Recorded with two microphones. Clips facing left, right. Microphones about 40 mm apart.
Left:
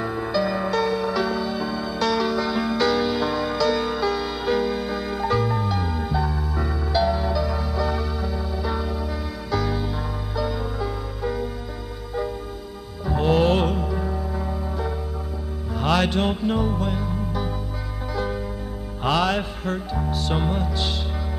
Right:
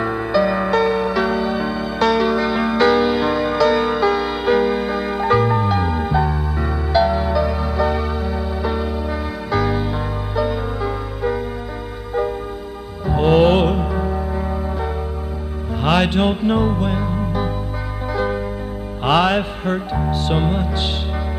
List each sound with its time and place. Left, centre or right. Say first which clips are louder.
0.0 s music: right 6 dB; right
13.0 s music: right 6 dB; right